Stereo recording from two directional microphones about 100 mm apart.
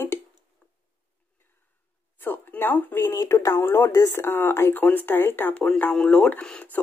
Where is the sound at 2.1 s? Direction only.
20° left (ahead or behind).